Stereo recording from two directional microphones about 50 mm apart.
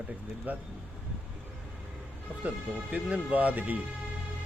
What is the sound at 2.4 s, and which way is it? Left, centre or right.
Speech, right.